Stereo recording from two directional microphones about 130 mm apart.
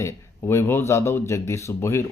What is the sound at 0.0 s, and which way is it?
Speech, 20° left (ahead or behind).